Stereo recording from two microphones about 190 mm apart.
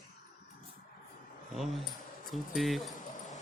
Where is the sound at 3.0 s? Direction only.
40° left (ahead or behind).